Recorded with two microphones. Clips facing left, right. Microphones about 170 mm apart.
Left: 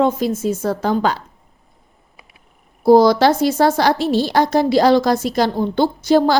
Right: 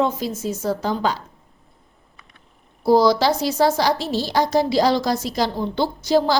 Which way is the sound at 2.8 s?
50° left (ahead or behind).